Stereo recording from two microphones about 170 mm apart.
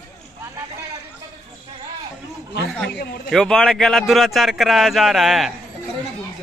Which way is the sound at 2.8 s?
70° left (ahead or behind).